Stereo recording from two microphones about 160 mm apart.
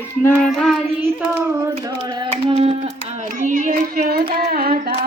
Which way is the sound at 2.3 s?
35° right (ahead or behind).